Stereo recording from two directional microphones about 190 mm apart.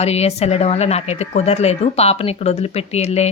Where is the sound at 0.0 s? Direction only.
35° left (ahead or behind).